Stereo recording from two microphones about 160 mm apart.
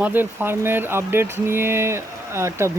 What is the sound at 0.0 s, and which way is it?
Speech, 10° right (ahead or behind).